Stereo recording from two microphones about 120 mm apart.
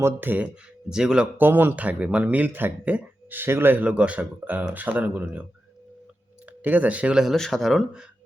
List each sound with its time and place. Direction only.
0.0 s speech: 15° right (ahead or behind)
0.9 s speech: 5° right (ahead or behind)